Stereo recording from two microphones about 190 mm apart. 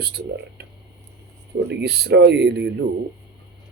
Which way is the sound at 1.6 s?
60° right (ahead or behind).